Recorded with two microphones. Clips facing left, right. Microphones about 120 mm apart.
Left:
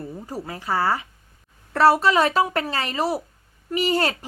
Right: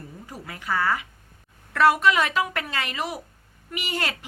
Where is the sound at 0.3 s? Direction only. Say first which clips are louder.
Left 2 dB; 35° left (ahead or behind).